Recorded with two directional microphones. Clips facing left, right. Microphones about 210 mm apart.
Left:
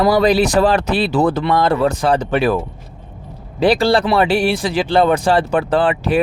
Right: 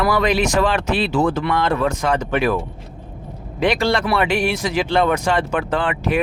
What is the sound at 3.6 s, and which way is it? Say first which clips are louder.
Speech: left 5 dB; 35° left (ahead or behind).